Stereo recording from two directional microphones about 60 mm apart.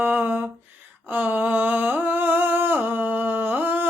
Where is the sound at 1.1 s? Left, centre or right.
Right.